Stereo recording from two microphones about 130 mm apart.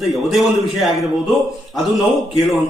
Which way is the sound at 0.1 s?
Centre (ahead or behind).